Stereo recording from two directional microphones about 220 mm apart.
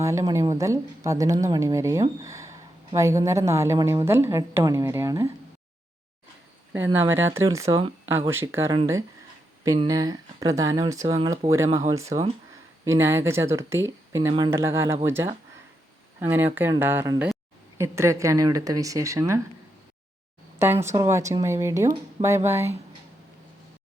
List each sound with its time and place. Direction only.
0.0 s speech: 15° right (ahead or behind)
6.7 s speech: 10° right (ahead or behind)
20.6 s speech: 10° right (ahead or behind)